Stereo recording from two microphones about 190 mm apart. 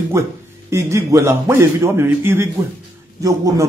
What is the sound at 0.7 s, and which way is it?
A man's voice, 15° right (ahead or behind).